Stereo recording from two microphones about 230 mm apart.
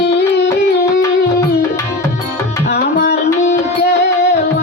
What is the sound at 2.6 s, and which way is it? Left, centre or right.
Tabla, left.